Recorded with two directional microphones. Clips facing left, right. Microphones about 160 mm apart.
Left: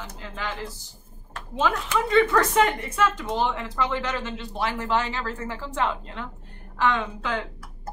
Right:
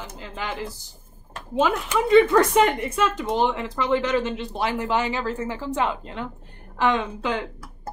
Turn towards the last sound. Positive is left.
turn(degrees=-15)  # may be behind; listen again after turning